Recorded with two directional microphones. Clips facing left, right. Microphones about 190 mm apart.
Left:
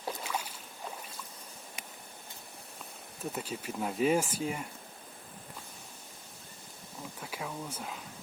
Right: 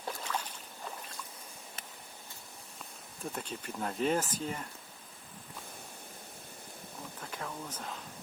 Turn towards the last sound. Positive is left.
turn(degrees=10)  # may be behind; listen again after turning